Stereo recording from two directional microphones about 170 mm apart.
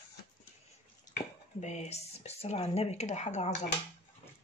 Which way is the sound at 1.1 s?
45° left (ahead or behind).